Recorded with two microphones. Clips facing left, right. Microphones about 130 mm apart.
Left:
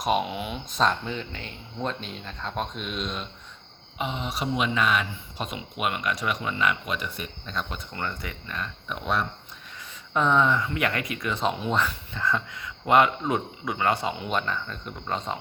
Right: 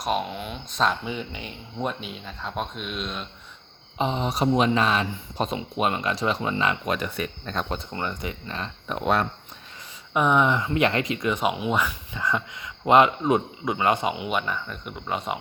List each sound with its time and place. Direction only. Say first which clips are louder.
0.0 s speech: left 1 dB; 5° left (ahead or behind)
1.0 s speech: right 2 dB; 10° right (ahead or behind)
3.9 s speech: right 5 dB; 35° right (ahead or behind)
6.8 s speech: right 5 dB; 45° right (ahead or behind)
7.9 s speech: right 3 dB; 20° right (ahead or behind)
10.2 s speech: right 1 dB; 15° right (ahead or behind)